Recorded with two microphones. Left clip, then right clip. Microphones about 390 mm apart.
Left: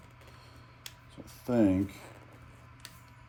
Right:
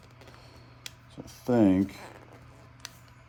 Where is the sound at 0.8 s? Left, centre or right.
Right.